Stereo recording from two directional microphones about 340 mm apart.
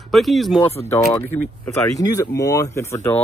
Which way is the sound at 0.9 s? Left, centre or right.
Centre.